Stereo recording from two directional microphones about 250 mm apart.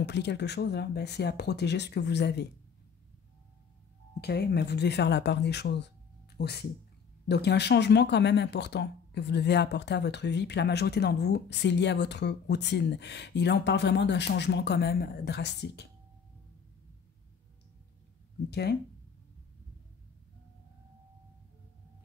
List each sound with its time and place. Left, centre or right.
0.0 s speech: left
4.2 s speech: left
18.5 s speech: left